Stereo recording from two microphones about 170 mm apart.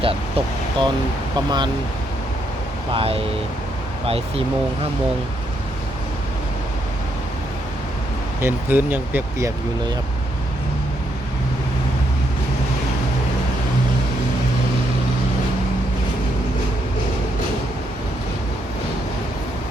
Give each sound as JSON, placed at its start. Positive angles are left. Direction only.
{"t": 0.0, "sound": "speech", "side_deg": -35}
{"t": 2.9, "sound": "speech", "side_deg": -35}
{"t": 8.4, "sound": "speech", "side_deg": -15}